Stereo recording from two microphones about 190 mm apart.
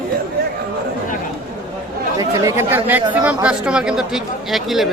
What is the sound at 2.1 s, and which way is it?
Speech, 15° right (ahead or behind).